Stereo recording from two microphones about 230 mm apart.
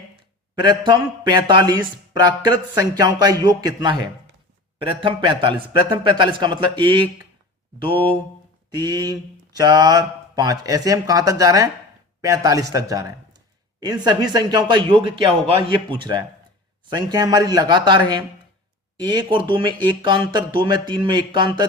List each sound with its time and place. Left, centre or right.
0.5 s speech: centre
8.7 s speech: centre